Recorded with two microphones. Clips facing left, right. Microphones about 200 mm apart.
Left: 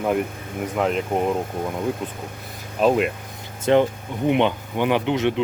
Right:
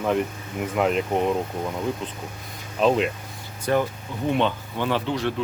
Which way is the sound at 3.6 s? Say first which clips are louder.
Left 5 dB; 25° left (ahead or behind).